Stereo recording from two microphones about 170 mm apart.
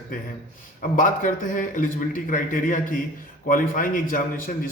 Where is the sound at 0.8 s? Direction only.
50° left (ahead or behind).